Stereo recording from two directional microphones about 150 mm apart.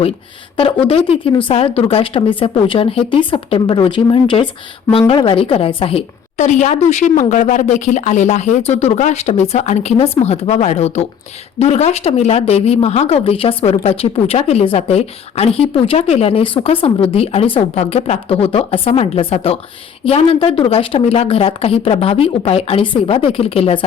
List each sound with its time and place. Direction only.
0.9 s a woman's voice: 40° left (ahead or behind)
6.3 s a woman's voice: 55° left (ahead or behind)